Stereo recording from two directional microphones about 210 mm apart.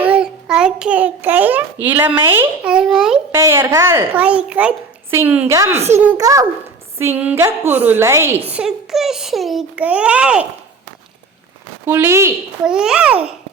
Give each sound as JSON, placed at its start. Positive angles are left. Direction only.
{"t": 0.0, "sound": "a child's voice", "side_deg": -5}
{"t": 5.7, "sound": "a child's voice", "side_deg": -30}
{"t": 6.0, "sound": "a woman's voice", "side_deg": -10}
{"t": 11.9, "sound": "a woman's voice", "side_deg": -10}